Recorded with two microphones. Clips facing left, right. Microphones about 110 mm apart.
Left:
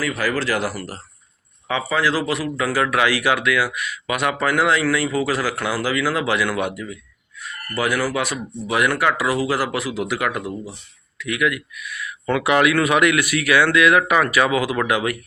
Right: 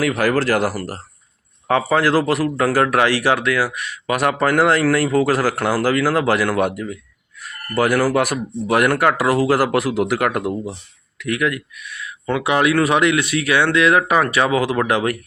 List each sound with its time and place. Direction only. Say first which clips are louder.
0.0 s speech: right 5 dB; 55° right (ahead or behind)
11.2 s speech: right 1 dB; 40° right (ahead or behind)